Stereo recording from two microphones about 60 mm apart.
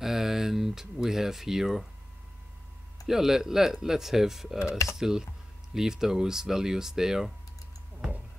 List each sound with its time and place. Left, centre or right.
0.0 s a sound: centre
3.1 s speech: centre
4.6 s mechanisms: left
4.9 s speech: centre